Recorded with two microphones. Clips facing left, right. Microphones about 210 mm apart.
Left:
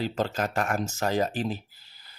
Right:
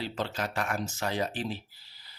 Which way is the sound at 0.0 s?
45° left (ahead or behind).